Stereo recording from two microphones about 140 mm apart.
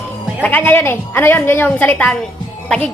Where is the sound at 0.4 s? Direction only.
10° left (ahead or behind).